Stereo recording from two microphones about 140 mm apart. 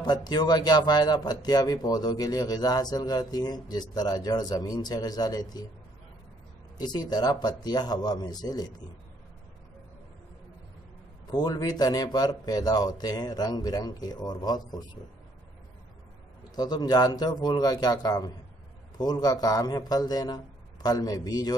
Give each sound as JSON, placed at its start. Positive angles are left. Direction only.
{"t": 0.0, "sound": "speech", "side_deg": 30}
{"t": 6.8, "sound": "speech", "side_deg": 30}
{"t": 11.2, "sound": "speech", "side_deg": 30}
{"t": 16.5, "sound": "speech", "side_deg": 30}